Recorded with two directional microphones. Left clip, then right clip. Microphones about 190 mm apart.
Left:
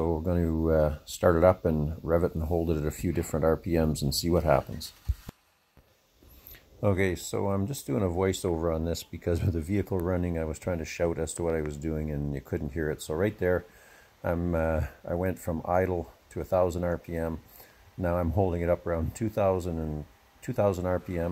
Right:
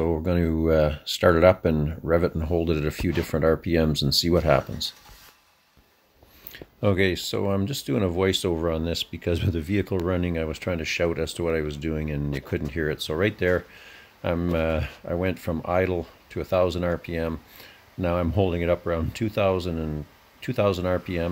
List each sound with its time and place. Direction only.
0.0 s speech: 15° right (ahead or behind)
6.8 s speech: 20° right (ahead or behind)